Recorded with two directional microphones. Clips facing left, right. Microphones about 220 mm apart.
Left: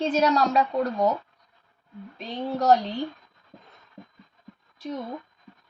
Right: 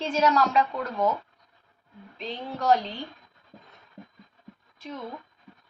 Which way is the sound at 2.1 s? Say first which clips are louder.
Left 5 dB; 40° left (ahead or behind).